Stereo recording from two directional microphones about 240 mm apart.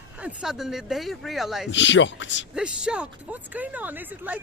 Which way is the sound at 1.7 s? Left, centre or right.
Left.